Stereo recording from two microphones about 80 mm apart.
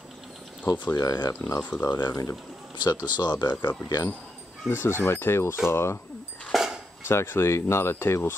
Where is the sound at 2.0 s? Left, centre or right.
Left.